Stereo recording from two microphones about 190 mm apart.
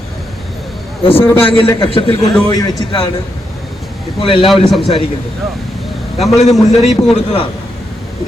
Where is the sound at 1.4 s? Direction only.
30° left (ahead or behind).